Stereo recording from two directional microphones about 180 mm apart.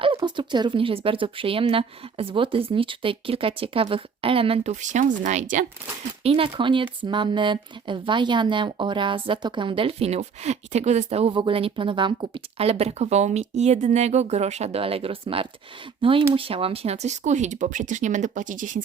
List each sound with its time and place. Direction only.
0.2 s speech: 25° right (ahead or behind); by 5.6 s 45° right (ahead or behind)
6.2 s speech: 30° right (ahead or behind); by 18.8 s 45° right (ahead or behind)